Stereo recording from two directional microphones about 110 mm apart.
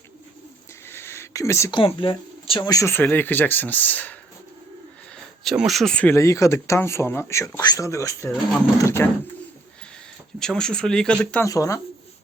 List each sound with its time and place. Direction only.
0.9 s a sound: 20° left (ahead or behind)
1.7 s speech: 50° left (ahead or behind)
2.6 s speech: 30° left (ahead or behind)
5.4 s speech: centre (ahead or behind)
6.1 s speech: 25° left (ahead or behind)
10.4 s speech: 5° left (ahead or behind)
11.4 s speech: 30° left (ahead or behind)